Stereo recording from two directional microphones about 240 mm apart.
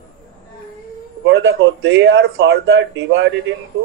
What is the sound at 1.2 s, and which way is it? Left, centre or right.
A man's voice, right.